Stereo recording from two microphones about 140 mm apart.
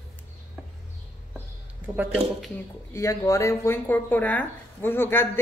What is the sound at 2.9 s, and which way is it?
A woman's voice, 20° left (ahead or behind).